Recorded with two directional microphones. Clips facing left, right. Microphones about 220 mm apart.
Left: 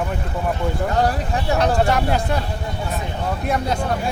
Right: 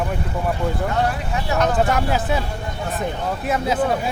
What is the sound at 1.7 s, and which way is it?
Speech, centre (ahead or behind).